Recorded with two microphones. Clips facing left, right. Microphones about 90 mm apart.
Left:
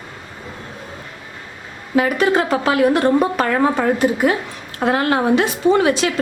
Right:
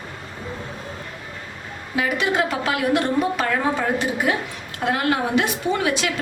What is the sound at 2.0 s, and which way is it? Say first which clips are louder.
A woman's voice: left 5 dB; 40° left (ahead or behind).